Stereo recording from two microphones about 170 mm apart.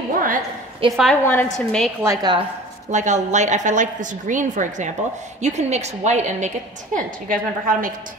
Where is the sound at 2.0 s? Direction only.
20° right (ahead or behind).